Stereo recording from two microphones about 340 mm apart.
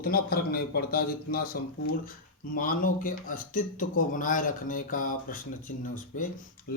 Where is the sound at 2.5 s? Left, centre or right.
Left.